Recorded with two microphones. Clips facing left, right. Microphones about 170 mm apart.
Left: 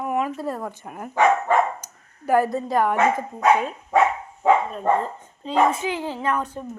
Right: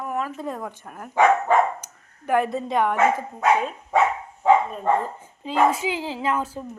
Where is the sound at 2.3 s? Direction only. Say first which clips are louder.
Left 2 dB; centre (ahead or behind).